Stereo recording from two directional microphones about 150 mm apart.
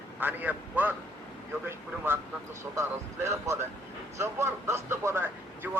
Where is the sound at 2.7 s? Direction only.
20° right (ahead or behind).